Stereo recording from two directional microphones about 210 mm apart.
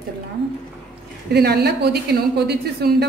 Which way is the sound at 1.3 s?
50° right (ahead or behind).